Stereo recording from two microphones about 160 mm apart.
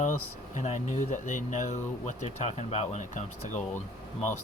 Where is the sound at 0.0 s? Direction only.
50° left (ahead or behind).